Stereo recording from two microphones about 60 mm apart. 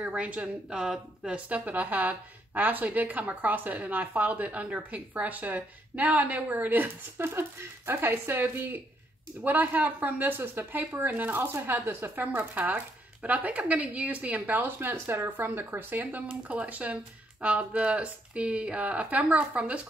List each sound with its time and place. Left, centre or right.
0.0 s a woman's voice: centre
7.2 s a woman's voice: right